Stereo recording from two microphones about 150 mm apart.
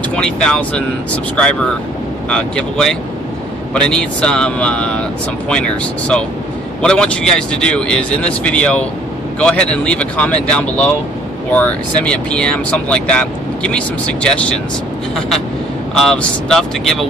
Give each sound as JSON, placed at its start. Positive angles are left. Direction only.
{"t": 0.1, "sound": "speech", "side_deg": 5}